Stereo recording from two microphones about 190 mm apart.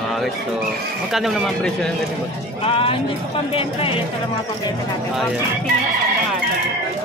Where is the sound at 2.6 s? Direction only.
30° left (ahead or behind).